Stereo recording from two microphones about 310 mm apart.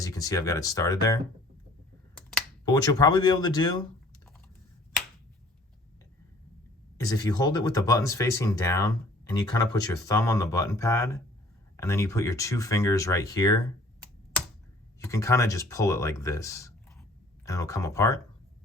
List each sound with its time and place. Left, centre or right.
0.0 s speech: centre
2.6 s speech: centre
7.0 s speech: centre
14.9 s speech: centre